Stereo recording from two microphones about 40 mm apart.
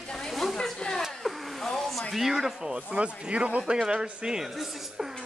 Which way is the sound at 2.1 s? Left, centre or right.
Centre.